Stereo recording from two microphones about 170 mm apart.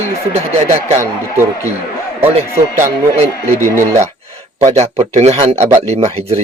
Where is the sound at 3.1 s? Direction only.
40° right (ahead or behind).